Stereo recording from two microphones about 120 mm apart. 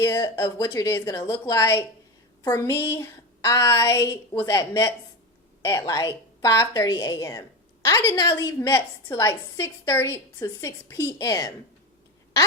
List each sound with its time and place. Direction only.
0.0 s a woman's voice: 25° left (ahead or behind)